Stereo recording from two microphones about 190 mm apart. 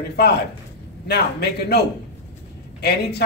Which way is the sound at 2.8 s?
60° left (ahead or behind).